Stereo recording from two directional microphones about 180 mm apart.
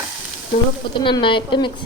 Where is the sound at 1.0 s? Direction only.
25° left (ahead or behind).